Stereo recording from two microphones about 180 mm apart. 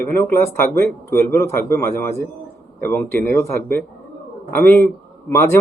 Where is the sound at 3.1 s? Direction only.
55° right (ahead or behind).